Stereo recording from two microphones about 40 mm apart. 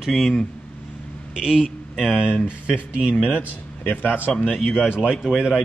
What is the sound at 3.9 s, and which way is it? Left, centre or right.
Speech, left.